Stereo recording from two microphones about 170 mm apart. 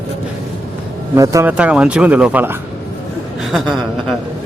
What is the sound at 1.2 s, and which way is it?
Speech, 20° right (ahead or behind).